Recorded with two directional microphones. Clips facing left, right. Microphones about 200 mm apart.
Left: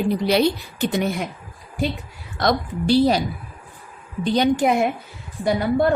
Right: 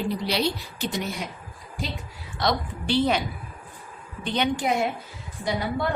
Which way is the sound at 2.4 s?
45° left (ahead or behind).